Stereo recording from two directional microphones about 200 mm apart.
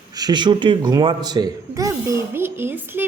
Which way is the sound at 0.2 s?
20° right (ahead or behind).